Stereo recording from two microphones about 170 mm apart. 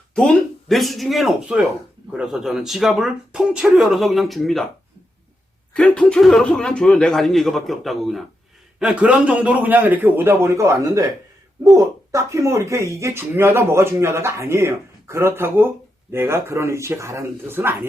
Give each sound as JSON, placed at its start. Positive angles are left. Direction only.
{"t": 0.1, "sound": "speech", "side_deg": 0}
{"t": 5.7, "sound": "speech", "side_deg": 5}